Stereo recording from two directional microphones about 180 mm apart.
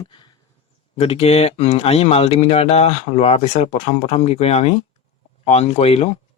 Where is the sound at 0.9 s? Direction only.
35° left (ahead or behind).